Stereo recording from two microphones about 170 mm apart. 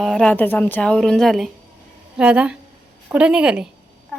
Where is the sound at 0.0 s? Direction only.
5° left (ahead or behind).